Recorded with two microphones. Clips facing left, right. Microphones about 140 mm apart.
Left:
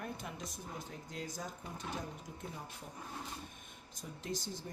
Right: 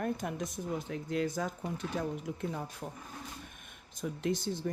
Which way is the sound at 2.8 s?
75° right (ahead or behind).